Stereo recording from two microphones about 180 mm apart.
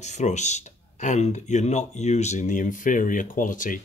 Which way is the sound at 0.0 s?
40° left (ahead or behind).